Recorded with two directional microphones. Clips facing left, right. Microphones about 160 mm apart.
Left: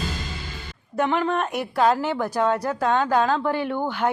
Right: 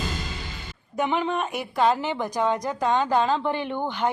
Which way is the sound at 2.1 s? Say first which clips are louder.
Left 2 dB; 15° right (ahead or behind).